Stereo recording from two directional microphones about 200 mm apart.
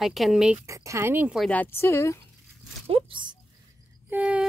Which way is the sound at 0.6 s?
15° right (ahead or behind).